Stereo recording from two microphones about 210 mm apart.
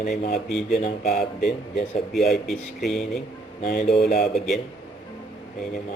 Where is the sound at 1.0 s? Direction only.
45° left (ahead or behind).